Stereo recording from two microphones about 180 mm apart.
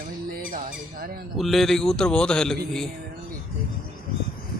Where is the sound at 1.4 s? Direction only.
Centre (ahead or behind).